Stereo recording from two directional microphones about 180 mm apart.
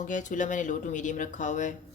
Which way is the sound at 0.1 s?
45° left (ahead or behind).